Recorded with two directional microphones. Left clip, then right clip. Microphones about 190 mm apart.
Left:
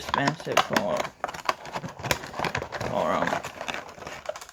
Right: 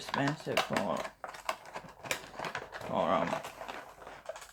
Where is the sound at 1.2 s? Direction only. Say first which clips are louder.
Left 11 dB; 55° left (ahead or behind).